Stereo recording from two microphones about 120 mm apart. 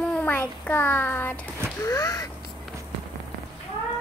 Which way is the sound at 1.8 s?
25° left (ahead or behind).